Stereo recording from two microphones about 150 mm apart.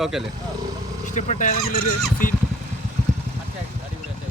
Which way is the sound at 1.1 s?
50° left (ahead or behind).